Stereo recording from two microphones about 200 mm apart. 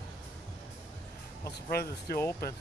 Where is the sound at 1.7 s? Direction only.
50° left (ahead or behind).